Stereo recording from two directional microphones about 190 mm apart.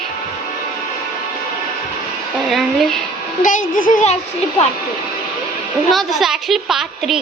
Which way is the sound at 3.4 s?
45° left (ahead or behind).